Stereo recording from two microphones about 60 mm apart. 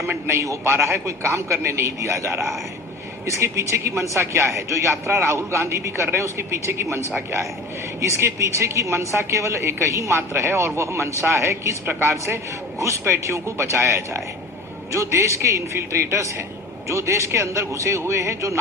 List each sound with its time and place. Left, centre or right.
0.3 s a man's voice: right
8.0 s a man's voice: right
10.2 s a man's voice: right
11.9 s a man's voice: right